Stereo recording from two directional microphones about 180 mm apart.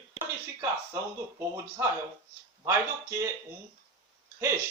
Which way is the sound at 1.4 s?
15° right (ahead or behind).